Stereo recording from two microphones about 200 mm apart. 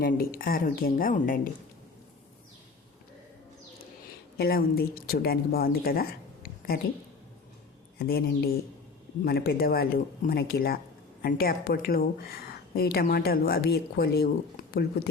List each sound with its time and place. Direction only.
0.0 s a woman's voice: 45° left (ahead or behind)
4.4 s speech: 50° left (ahead or behind)
7.9 s a woman's voice: 50° left (ahead or behind)